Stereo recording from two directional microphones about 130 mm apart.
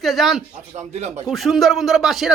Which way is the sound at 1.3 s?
Centre (ahead or behind).